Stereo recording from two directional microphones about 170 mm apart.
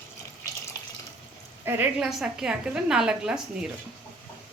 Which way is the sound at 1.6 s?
10° right (ahead or behind).